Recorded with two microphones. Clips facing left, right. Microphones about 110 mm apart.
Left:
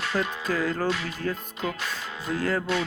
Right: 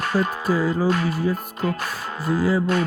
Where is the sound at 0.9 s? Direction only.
45° right (ahead or behind).